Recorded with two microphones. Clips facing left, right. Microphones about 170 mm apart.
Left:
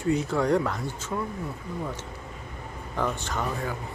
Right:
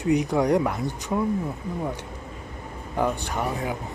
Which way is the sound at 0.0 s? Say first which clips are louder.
Right 3 dB; 15° right (ahead or behind).